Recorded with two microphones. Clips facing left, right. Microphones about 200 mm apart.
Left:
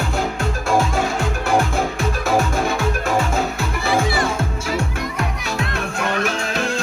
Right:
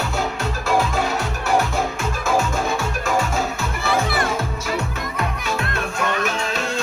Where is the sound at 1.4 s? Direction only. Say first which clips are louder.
Left 1 dB; 55° left (ahead or behind).